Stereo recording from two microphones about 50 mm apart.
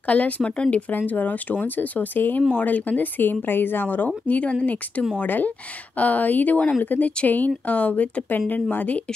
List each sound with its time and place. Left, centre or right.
0.0 s speech: left
4.3 s speech: left